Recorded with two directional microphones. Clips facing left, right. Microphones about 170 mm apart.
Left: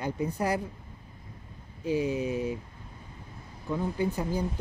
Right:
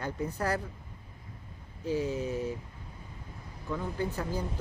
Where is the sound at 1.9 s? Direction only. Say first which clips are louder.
Left 3 dB; 15° left (ahead or behind).